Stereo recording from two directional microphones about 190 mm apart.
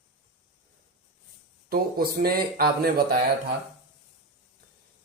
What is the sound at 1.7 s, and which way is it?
Speech, 55° right (ahead or behind).